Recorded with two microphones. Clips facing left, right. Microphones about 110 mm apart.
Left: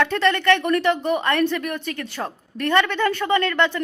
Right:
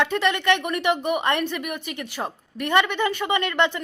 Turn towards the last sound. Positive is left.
turn(degrees=-15)  # may be behind; listen again after turning